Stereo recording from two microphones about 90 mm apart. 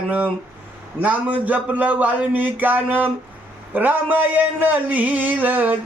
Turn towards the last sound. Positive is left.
turn(degrees=-20)  # may be behind; listen again after turning